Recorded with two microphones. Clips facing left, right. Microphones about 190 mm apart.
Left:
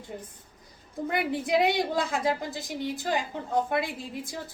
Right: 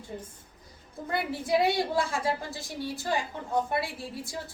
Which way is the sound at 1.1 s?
20° left (ahead or behind).